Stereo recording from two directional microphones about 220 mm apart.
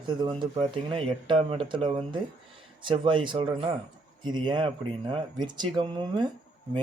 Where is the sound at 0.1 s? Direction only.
20° right (ahead or behind).